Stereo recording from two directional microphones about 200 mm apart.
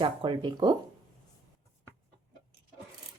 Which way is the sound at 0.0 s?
25° right (ahead or behind).